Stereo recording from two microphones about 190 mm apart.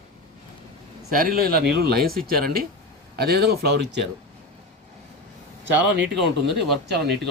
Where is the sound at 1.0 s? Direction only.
50° right (ahead or behind).